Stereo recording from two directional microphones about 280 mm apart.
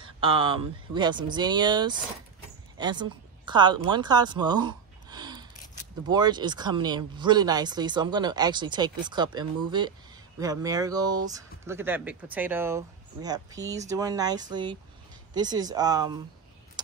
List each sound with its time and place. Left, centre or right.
0.0 s a woman's voice: centre